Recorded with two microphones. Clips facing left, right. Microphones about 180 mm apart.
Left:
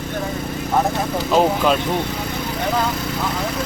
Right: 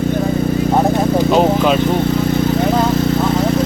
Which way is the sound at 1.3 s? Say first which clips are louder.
Even; 5° right (ahead or behind).